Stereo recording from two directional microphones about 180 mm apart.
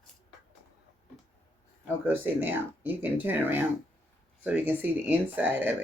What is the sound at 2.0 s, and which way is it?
Speech, 10° right (ahead or behind).